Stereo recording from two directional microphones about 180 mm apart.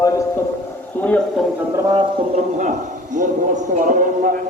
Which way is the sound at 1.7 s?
20° right (ahead or behind).